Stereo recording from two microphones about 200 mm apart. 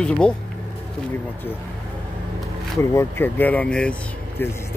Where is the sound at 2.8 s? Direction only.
10° left (ahead or behind).